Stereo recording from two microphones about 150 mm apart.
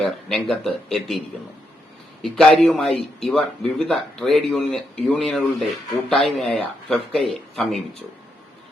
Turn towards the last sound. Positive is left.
turn(degrees=0)  # may be behind; listen again after turning